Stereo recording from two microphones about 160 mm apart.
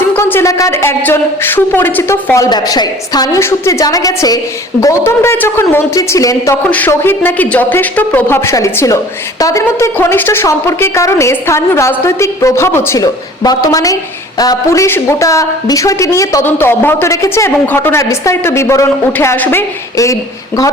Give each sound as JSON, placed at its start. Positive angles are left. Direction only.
{"t": 0.1, "sound": "a woman's voice", "side_deg": 15}